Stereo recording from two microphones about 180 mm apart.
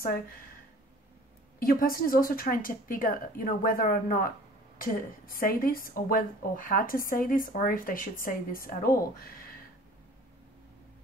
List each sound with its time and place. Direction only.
1.6 s a woman's voice: 55° left (ahead or behind)